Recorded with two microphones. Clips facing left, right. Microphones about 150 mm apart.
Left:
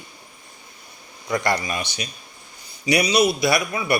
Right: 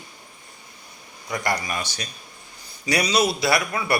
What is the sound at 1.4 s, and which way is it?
A man's voice, 20° left (ahead or behind).